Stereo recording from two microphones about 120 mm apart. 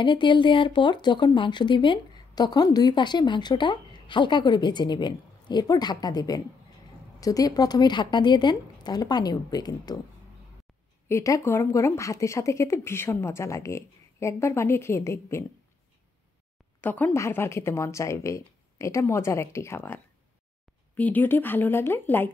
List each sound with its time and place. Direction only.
0.0 s speech: 40° left (ahead or behind)
11.1 s a woman's voice: 25° left (ahead or behind)
16.8 s a woman's voice: 15° left (ahead or behind)